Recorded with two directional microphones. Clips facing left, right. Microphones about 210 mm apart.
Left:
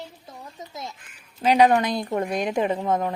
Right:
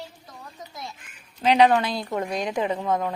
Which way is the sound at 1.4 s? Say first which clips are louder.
Left 1 dB; 10° left (ahead or behind).